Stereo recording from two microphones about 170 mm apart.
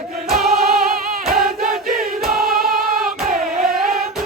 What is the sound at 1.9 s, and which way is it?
Choir, 60° right (ahead or behind).